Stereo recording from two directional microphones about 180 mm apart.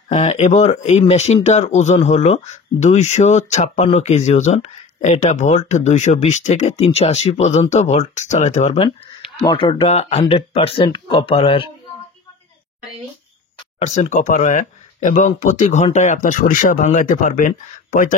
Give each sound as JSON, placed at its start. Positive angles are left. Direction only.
{"t": 0.1, "sound": "speech", "side_deg": 35}
{"t": 9.5, "sound": "speech", "side_deg": 25}
{"t": 13.7, "sound": "speech", "side_deg": 40}